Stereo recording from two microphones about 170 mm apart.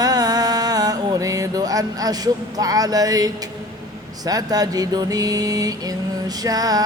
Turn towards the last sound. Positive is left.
turn(degrees=-20)  # may be behind; listen again after turning